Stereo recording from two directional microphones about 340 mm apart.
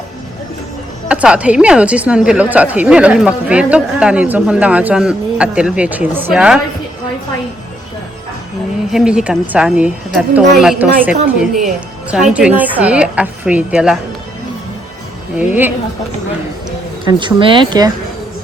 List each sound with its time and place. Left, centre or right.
1.0 s a woman's voice: centre
8.9 s a woman's voice: centre
15.4 s a woman's voice: centre
17.1 s speech: centre